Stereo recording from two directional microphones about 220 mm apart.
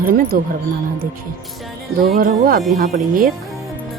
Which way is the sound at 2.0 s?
40° right (ahead or behind).